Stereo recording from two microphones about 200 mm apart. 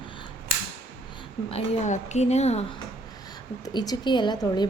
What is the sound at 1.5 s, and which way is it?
Speech, 30° left (ahead or behind).